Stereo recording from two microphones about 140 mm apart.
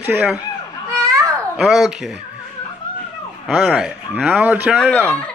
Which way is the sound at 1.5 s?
5° right (ahead or behind).